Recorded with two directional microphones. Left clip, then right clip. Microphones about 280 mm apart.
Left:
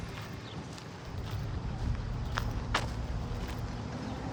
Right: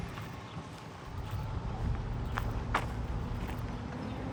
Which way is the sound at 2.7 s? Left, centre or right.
Centre.